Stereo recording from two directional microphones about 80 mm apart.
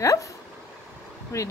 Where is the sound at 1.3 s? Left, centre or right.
Left.